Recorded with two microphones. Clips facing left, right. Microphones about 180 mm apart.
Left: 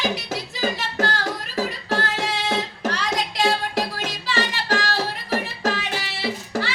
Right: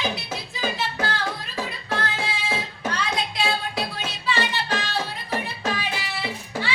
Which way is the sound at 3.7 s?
90° left.